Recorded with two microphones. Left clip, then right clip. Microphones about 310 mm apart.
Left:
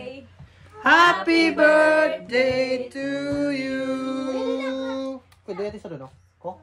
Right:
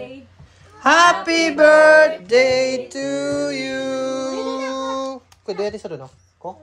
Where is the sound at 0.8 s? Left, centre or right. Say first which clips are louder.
Right 3 dB; centre.